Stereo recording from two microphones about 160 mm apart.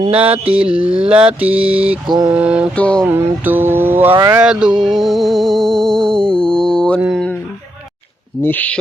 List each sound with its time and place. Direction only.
0.3 s mantra: 35° right (ahead or behind)
0.6 s mantra: 5° right (ahead or behind)
0.9 s mantra: 35° right (ahead or behind)
1.4 s mantra: 10° right (ahead or behind)
2.0 s mantra: 25° right (ahead or behind)
2.3 s mantra: 10° right (ahead or behind)
2.7 s speech: 10° left (ahead or behind)
3.0 s mantra: 15° right (ahead or behind)
4.4 s music: 5° right (ahead or behind)
6.4 s mantra: 5° left (ahead or behind)
8.4 s speech: 10° left (ahead or behind)